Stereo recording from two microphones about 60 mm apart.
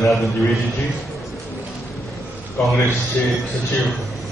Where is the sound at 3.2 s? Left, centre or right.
Left.